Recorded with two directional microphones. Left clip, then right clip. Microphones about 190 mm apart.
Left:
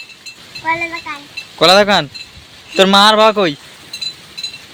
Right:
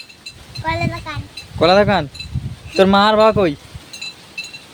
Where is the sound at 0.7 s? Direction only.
20° right (ahead or behind).